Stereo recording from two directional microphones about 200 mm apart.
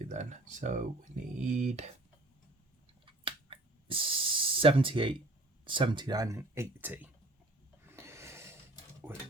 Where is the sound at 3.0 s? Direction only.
25° right (ahead or behind).